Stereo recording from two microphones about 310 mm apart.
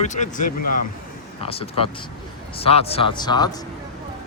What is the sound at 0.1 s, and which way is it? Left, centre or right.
Speech, left.